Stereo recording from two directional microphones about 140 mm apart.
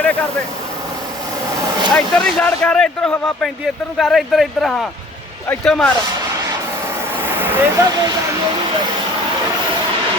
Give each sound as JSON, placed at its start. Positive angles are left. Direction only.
{"t": 0.0, "sound": "vehicle", "side_deg": 10}
{"t": 1.9, "sound": "speech", "side_deg": 5}
{"t": 7.3, "sound": "vehicle", "side_deg": -15}
{"t": 7.9, "sound": "speech", "side_deg": -25}